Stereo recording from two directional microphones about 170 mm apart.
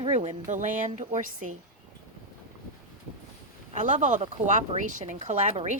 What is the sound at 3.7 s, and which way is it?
Speech, 45° right (ahead or behind).